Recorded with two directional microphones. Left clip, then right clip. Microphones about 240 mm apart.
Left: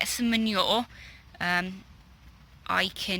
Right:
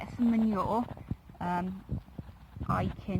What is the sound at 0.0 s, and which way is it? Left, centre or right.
Speech, centre.